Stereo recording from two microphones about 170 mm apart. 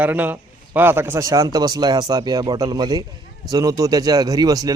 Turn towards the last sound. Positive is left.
turn(degrees=-20)  # may be behind; listen again after turning